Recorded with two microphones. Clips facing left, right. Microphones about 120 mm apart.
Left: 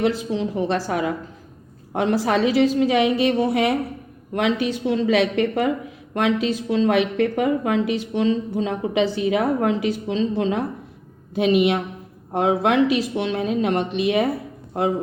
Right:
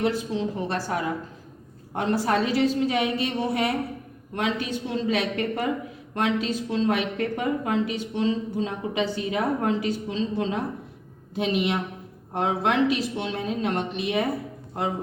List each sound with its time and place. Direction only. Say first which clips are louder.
0.0 s a woman's voice: left 3 dB; 90° left